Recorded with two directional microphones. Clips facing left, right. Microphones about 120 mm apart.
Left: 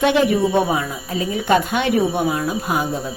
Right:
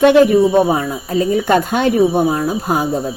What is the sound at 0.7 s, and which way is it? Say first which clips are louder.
Speech: right 5 dB; 35° right (ahead or behind).